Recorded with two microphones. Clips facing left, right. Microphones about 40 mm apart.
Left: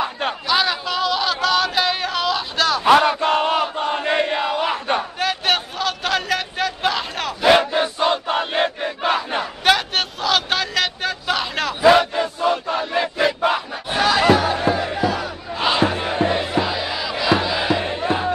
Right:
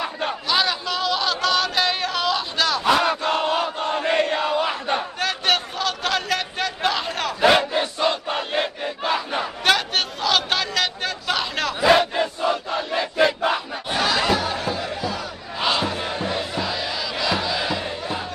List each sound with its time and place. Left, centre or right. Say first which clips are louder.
0.5 s a sound: left 2 dB; centre
2.8 s battle cry: left 7 dB; left
3.9 s crowd: right 1 dB; centre
4.9 s a sound: left 2 dB; centre
7.7 s crowd: left 3 dB; centre
9.4 s a sound: left 1 dB; centre
11.9 s crowd: even; centre
12.7 s battle cry: left 1 dB; centre
14.6 s crowd: left 6 dB; left
15.1 s battle cry: left 3 dB; centre
16.3 s music: left 5 dB; centre